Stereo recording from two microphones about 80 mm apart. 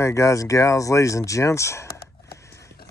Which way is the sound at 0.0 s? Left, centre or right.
Left.